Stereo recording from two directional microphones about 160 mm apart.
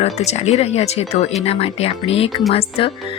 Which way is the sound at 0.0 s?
45° left (ahead or behind).